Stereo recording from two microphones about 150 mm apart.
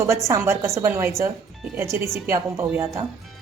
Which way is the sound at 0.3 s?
20° right (ahead or behind).